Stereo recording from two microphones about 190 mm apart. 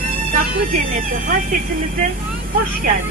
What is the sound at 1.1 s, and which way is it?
Speech, 45° right (ahead or behind).